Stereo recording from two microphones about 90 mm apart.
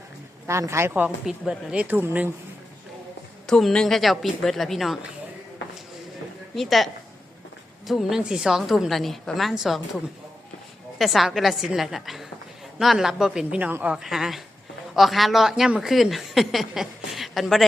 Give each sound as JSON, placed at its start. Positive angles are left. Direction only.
{"t": 0.4, "sound": "a woman's voice", "side_deg": -30}
{"t": 3.4, "sound": "a woman's voice", "side_deg": 5}
{"t": 6.6, "sound": "a woman's voice", "side_deg": 0}
{"t": 13.9, "sound": "a woman's voice", "side_deg": -5}